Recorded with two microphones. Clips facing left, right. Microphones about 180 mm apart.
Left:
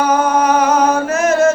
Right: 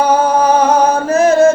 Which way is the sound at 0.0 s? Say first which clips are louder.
Right 2 dB; 30° right (ahead or behind).